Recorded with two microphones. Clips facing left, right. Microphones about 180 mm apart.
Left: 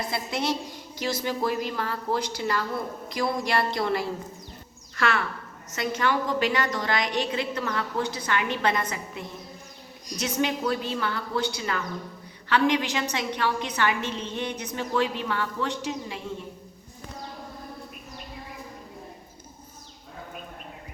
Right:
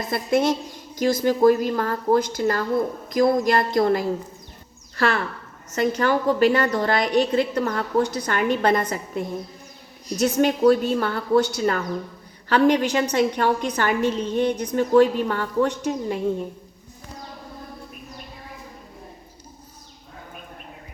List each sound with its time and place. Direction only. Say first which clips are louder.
0.0 s a woman's voice: right 8 dB; 50° right (ahead or behind)